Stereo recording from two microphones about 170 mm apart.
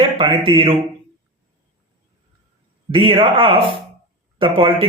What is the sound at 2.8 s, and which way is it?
Speech, 30° right (ahead or behind).